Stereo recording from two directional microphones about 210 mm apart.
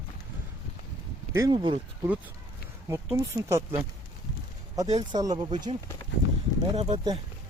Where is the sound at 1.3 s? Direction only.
20° right (ahead or behind).